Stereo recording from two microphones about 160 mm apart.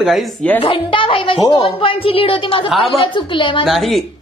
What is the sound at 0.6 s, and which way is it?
Speech, 35° left (ahead or behind).